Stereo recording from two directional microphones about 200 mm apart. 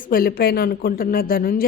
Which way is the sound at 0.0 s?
45° left (ahead or behind).